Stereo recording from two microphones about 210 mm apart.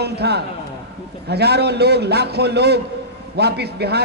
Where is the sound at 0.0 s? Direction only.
50° right (ahead or behind).